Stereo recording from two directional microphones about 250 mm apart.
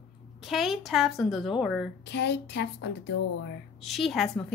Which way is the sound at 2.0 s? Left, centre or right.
Left.